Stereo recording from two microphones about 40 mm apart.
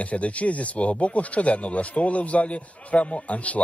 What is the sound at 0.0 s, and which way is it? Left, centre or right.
Speech, left.